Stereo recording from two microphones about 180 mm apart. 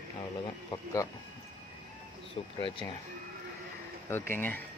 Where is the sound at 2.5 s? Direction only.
25° left (ahead or behind).